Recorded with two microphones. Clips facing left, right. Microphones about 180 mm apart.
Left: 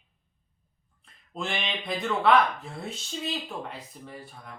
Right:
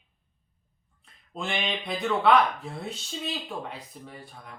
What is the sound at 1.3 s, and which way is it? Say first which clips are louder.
Speech: right 1 dB; centre (ahead or behind).